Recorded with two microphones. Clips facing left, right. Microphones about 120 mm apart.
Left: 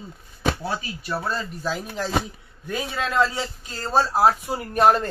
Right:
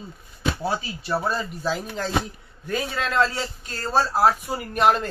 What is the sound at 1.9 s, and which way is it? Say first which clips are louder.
A man's voice: even; 5° left (ahead or behind).